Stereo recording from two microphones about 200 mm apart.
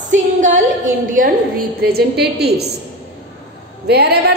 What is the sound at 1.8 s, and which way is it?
Speech, 55° right (ahead or behind).